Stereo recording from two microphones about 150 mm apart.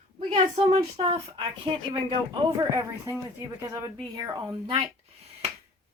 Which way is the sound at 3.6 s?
20° right (ahead or behind).